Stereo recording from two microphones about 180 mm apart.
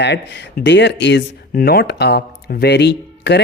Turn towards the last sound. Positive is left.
turn(degrees=70)  # may be behind; listen again after turning